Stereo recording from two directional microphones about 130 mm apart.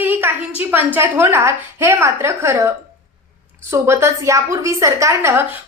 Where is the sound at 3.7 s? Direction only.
20° right (ahead or behind).